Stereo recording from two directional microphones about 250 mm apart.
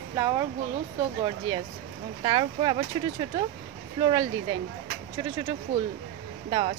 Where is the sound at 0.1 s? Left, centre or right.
Centre.